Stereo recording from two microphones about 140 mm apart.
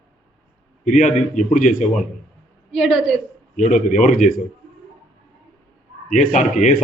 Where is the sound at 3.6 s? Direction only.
60° left (ahead or behind).